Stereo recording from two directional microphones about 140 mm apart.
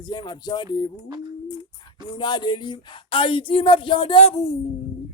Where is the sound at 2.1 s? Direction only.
30° left (ahead or behind).